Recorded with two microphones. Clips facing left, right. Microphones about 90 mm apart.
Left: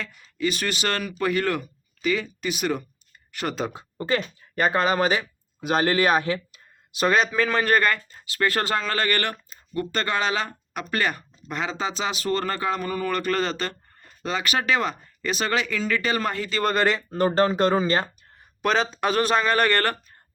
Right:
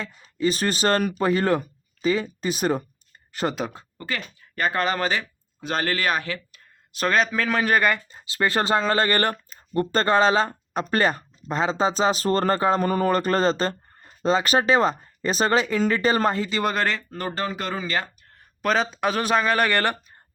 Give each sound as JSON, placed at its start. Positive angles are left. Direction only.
{"t": 0.0, "sound": "speech", "side_deg": -30}
{"t": 3.9, "sound": "speech", "side_deg": 25}
{"t": 6.9, "sound": "speech", "side_deg": 5}
{"t": 16.5, "sound": "speech", "side_deg": -15}
{"t": 16.7, "sound": "speech", "side_deg": 5}
{"t": 17.1, "sound": "speech", "side_deg": 25}
{"t": 18.6, "sound": "speech", "side_deg": 0}